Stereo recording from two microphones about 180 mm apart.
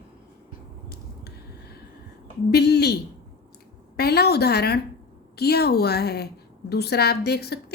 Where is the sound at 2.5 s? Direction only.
65° left (ahead or behind).